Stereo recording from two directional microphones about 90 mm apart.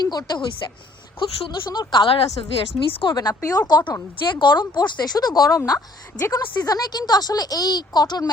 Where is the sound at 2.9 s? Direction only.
85° left.